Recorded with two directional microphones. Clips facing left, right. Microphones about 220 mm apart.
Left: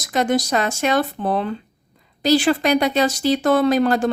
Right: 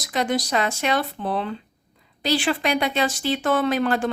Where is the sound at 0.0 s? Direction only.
45° left (ahead or behind).